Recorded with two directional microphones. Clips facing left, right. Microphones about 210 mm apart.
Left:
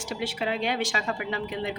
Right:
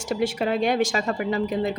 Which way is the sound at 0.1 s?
45° right (ahead or behind).